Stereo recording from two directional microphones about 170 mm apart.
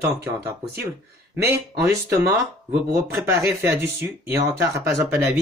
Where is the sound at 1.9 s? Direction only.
15° right (ahead or behind).